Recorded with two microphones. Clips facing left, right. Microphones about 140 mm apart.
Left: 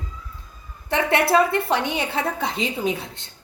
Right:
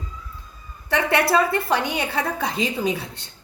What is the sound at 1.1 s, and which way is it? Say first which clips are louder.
A woman's voice: left 1 dB; 20° left (ahead or behind).